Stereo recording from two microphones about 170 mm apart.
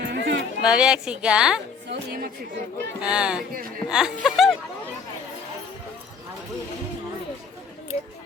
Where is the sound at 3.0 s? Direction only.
5° right (ahead or behind).